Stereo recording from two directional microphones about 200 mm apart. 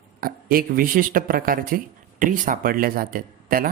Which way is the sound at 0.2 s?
45° right (ahead or behind).